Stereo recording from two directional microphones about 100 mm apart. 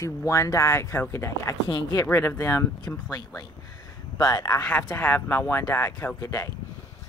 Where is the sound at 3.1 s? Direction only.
40° left (ahead or behind).